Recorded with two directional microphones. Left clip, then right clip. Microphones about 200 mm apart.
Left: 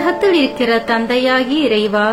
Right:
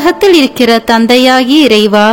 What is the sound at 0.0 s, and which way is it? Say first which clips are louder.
A woman's voice: right 7 dB; 55° right (ahead or behind).